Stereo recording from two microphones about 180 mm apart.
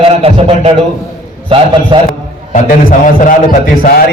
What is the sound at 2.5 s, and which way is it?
A man's voice, 45° left (ahead or behind).